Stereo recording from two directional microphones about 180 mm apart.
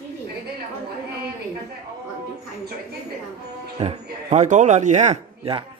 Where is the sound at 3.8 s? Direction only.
35° right (ahead or behind).